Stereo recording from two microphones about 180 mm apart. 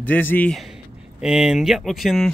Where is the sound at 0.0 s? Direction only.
10° left (ahead or behind).